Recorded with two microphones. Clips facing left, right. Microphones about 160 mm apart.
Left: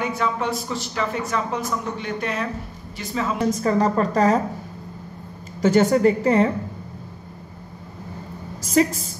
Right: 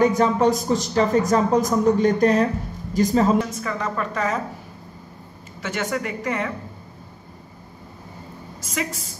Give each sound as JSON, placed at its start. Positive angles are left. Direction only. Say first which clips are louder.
{"t": 0.0, "sound": "speech", "louder": "right 7 dB", "side_deg": -40}
{"t": 3.4, "sound": "a woman's voice", "louder": "left 8 dB", "side_deg": 35}
{"t": 5.6, "sound": "a woman's voice", "louder": "left 10 dB", "side_deg": 35}
{"t": 8.6, "sound": "speech", "louder": "left 10 dB", "side_deg": 35}